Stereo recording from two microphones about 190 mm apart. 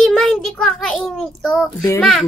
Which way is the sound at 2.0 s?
Centre (ahead or behind).